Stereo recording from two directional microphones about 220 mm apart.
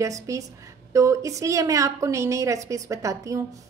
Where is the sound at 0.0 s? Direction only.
15° right (ahead or behind).